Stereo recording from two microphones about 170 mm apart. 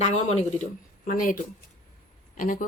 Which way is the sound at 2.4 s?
50° left (ahead or behind).